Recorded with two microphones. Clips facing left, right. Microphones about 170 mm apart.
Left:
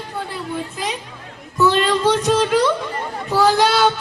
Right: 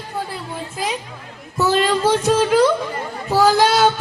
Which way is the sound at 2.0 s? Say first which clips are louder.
Right 1 dB; 45° right (ahead or behind).